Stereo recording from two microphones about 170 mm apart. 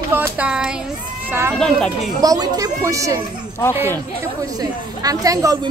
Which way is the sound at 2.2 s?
20° right (ahead or behind).